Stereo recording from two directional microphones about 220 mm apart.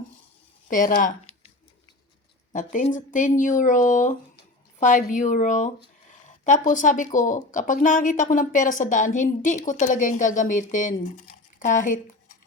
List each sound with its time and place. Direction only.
0.7 s speech: 35° left (ahead or behind)
2.5 s speech: 35° left (ahead or behind)